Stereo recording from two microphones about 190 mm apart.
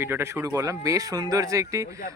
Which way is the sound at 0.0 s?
10° right (ahead or behind).